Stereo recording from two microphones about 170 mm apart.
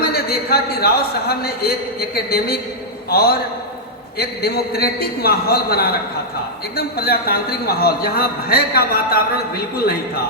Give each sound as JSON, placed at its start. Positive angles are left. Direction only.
{"t": 0.0, "sound": "a man's voice", "side_deg": 65}